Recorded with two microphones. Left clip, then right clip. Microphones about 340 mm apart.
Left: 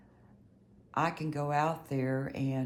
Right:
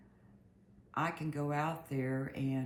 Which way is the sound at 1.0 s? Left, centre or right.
Left.